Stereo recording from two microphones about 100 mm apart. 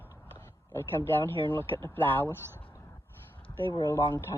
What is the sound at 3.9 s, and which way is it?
Speech, 35° left (ahead or behind).